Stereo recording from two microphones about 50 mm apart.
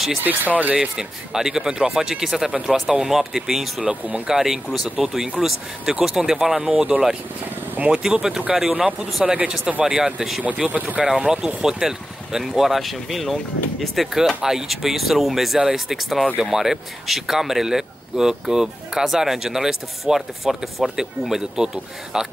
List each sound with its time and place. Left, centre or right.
0.2 s speech: right
0.7 s speech: centre